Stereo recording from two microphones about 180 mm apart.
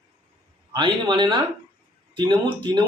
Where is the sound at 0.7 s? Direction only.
25° right (ahead or behind).